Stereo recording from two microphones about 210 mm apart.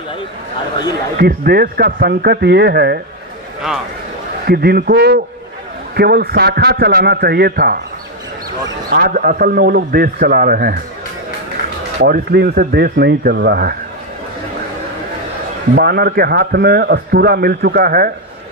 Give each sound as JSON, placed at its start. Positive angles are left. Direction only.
{"t": 1.1, "sound": "a man's voice", "side_deg": -45}
{"t": 4.5, "sound": "a man's voice", "side_deg": -45}
{"t": 12.0, "sound": "a man's voice", "side_deg": -45}
{"t": 15.7, "sound": "a man's voice", "side_deg": -50}